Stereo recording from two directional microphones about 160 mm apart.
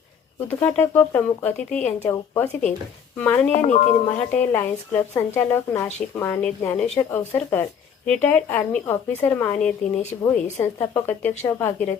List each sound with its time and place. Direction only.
0.4 s a woman's voice: 10° left (ahead or behind)
3.5 s speech: 45° left (ahead or behind)
4.3 s a woman's voice: 10° left (ahead or behind)